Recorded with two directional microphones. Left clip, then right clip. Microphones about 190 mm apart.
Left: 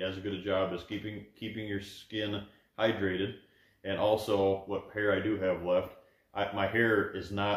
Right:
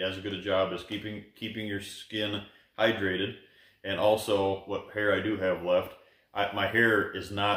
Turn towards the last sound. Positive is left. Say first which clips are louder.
# right 3 dB
turn(degrees=-15)  # may be behind; listen again after turning